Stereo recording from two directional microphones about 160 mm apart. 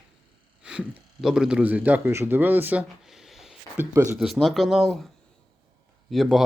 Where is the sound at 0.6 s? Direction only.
5° right (ahead or behind).